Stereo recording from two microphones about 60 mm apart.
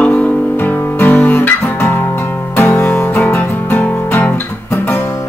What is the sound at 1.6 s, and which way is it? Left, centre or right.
Guitar, left.